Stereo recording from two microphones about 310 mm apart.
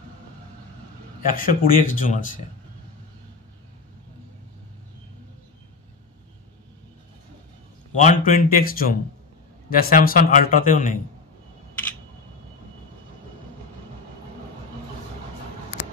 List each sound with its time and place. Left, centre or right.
1.2 s a man's voice: left
7.9 s a man's voice: left